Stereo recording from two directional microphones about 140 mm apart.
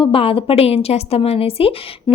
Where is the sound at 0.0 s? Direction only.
40° left (ahead or behind).